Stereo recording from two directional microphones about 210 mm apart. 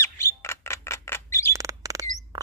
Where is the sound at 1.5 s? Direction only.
15° right (ahead or behind).